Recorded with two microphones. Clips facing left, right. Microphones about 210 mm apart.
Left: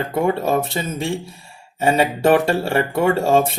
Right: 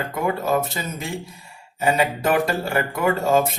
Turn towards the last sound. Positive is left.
turn(degrees=30)  # may be behind; listen again after turning